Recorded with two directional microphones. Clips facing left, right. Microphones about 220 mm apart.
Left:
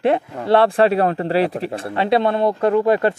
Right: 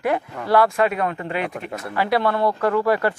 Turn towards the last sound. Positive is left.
turn(degrees=20)  # may be behind; listen again after turning